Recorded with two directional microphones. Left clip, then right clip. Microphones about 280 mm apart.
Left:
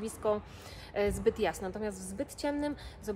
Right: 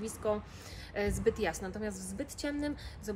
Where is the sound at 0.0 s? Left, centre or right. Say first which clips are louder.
Left 2 dB; centre.